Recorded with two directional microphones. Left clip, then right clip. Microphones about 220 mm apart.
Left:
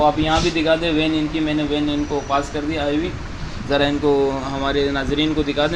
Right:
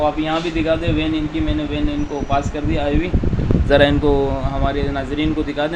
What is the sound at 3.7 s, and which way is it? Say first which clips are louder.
Speech: right 4 dB; 25° right (ahead or behind).